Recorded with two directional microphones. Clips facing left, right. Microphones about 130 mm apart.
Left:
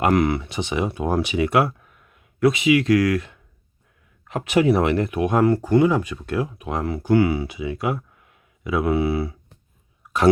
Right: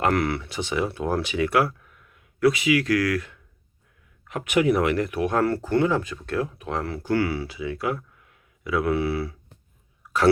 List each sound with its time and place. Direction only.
0.0 s speech: 15° left (ahead or behind)